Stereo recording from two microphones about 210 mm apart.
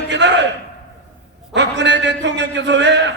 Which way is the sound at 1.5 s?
55° right (ahead or behind).